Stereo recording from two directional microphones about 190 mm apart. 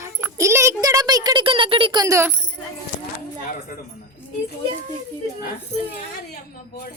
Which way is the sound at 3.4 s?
45° left (ahead or behind).